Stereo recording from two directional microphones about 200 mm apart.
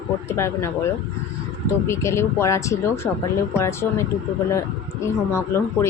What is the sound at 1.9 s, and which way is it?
A woman's voice, 15° left (ahead or behind).